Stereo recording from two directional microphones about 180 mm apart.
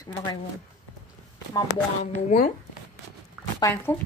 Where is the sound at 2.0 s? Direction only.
40° left (ahead or behind).